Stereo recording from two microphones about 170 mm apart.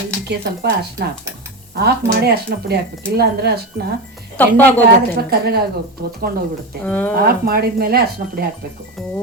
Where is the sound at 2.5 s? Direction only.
70° right (ahead or behind).